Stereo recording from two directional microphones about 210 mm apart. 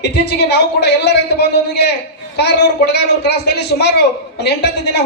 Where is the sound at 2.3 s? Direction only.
50° left (ahead or behind).